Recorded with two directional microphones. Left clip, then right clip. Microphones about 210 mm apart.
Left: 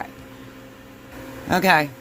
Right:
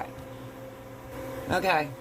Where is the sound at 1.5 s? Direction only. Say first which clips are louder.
Left 8 dB; 40° left (ahead or behind).